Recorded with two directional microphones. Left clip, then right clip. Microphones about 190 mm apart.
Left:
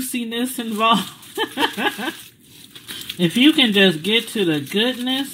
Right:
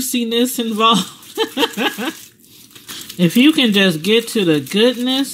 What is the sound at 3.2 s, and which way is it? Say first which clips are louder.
Speech: right 2 dB; 45° right (ahead or behind).